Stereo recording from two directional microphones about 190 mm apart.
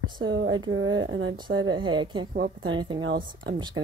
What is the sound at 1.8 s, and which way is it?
Speech, 25° right (ahead or behind).